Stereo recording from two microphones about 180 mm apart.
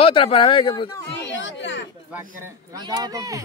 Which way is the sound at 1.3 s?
90° left.